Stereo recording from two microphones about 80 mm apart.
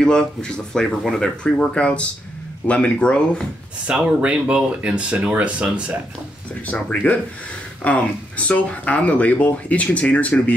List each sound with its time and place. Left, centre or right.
0.0 s speech: centre
3.8 s speech: centre
6.6 s speech: centre